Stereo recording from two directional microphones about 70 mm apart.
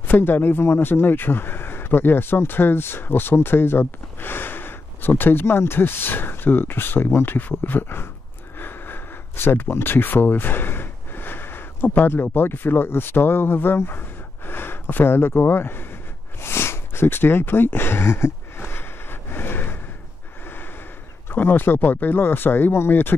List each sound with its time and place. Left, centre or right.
0.0 s speech: left
8.5 s a sound: left
20.4 s gasp: left
21.3 s speech: left